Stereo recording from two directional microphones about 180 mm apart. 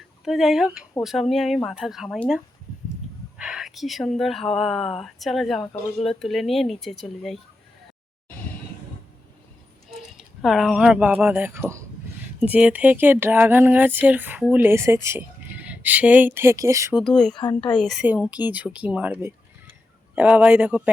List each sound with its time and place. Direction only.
0.3 s speech: centre (ahead or behind)
10.2 s speech: centre (ahead or behind)
16.9 s speech: centre (ahead or behind)
17.3 s speech: 25° left (ahead or behind)
17.7 s speech: centre (ahead or behind)